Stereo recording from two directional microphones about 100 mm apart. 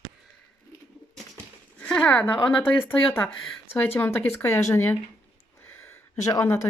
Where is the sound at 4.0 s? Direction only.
20° left (ahead or behind).